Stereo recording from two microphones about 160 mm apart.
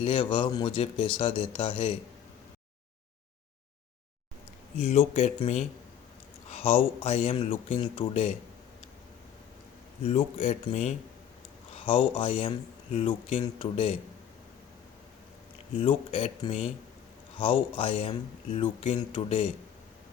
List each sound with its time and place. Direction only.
0.0 s speech: 30° left (ahead or behind)
4.8 s speech: 40° left (ahead or behind)
10.0 s speech: 40° left (ahead or behind)
11.9 s speech: 35° left (ahead or behind)
15.7 s speech: 35° left (ahead or behind)